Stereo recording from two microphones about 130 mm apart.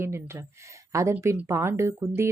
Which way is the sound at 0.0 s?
20° right (ahead or behind).